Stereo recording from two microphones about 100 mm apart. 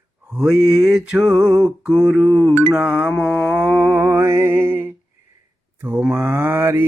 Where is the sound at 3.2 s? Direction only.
5° right (ahead or behind).